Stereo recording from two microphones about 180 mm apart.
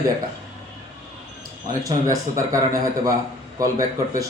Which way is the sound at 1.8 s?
20° right (ahead or behind).